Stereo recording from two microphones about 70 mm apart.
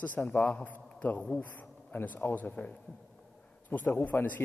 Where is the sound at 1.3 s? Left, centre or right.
Left.